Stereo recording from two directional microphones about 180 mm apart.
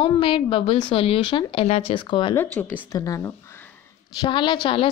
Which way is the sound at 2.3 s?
10° left (ahead or behind).